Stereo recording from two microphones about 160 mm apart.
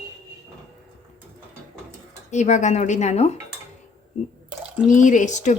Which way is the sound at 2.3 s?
45° left (ahead or behind).